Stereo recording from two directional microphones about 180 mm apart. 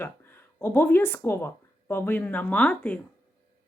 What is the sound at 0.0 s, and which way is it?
Speech, 10° left (ahead or behind).